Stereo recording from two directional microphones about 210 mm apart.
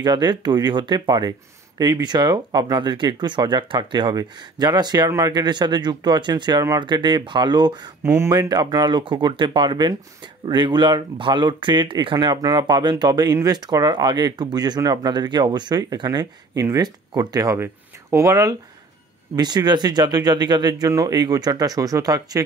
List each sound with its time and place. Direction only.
0.0 s speech: 20° right (ahead or behind)